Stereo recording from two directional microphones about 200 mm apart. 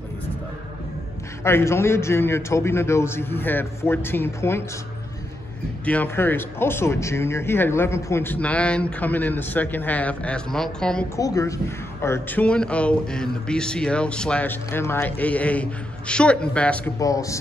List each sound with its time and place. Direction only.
1.4 s speech: 15° left (ahead or behind)
5.9 s speech: 10° left (ahead or behind)
11.1 s speech: 15° left (ahead or behind)
17.0 s speech: 15° left (ahead or behind)